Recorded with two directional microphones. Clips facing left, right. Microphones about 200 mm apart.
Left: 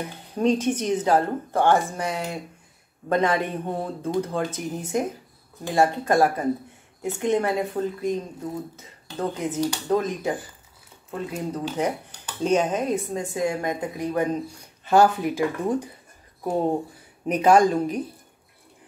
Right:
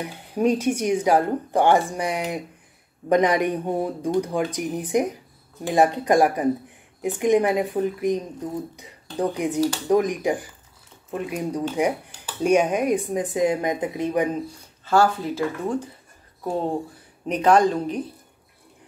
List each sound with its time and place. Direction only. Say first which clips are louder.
0.0 s speech: right 1 dB; 10° right (ahead or behind)
14.9 s speech: left 1 dB; 15° left (ahead or behind)
17.3 s speech: even; 10° left (ahead or behind)